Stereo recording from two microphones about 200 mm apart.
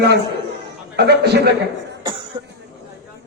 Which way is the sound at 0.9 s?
55° right (ahead or behind).